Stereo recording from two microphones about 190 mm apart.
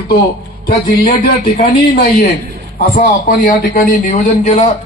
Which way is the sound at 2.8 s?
55° left (ahead or behind).